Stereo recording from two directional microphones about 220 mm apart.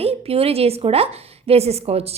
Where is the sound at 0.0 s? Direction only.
25° right (ahead or behind).